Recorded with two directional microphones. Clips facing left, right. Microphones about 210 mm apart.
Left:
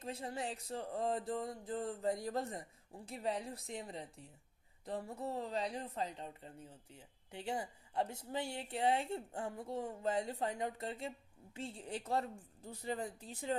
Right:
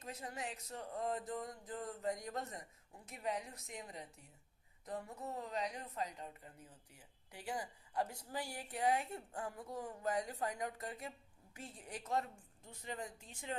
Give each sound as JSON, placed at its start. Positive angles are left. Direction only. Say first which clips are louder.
{"t": 0.0, "sound": "speech", "louder": "left 4 dB", "side_deg": 30}